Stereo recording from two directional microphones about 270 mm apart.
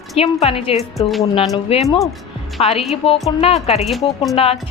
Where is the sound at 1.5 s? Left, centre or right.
Centre.